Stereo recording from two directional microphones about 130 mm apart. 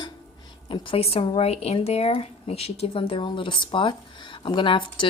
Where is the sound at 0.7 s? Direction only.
45° left (ahead or behind).